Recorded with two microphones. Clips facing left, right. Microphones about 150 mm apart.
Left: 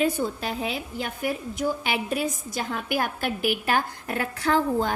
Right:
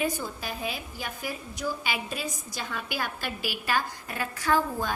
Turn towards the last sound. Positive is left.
turn(degrees=60)  # may be behind; listen again after turning